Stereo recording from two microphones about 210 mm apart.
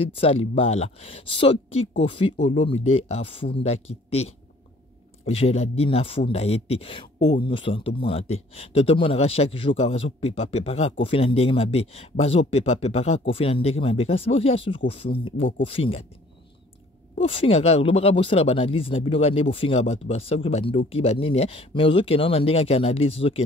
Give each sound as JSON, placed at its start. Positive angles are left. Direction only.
{"t": 0.0, "sound": "speech", "side_deg": 25}
{"t": 17.3, "sound": "speech", "side_deg": 25}